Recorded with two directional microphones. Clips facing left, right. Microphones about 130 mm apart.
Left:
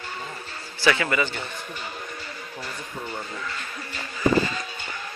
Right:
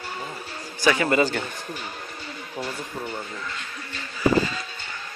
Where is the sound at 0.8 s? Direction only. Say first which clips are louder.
Right 1 dB; 20° right (ahead or behind).